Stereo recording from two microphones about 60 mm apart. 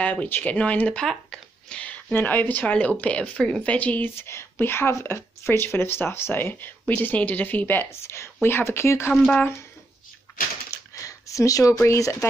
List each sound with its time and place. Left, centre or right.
0.0 s speech: left
0.9 s speech: centre
2.1 s speech: left
4.1 s speech: left
8.0 s speech: left
11.0 s a sound: left
11.9 s speech: left